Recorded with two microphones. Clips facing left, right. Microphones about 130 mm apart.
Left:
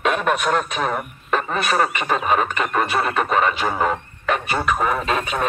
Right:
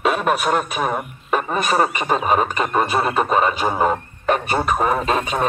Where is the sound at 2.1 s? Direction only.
30° right (ahead or behind).